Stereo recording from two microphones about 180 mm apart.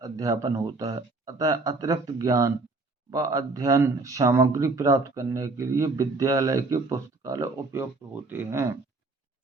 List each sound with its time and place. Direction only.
0.0 s speech: 20° right (ahead or behind)